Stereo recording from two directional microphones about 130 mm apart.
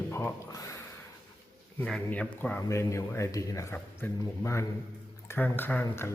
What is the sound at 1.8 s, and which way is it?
A man's voice, 10° left (ahead or behind).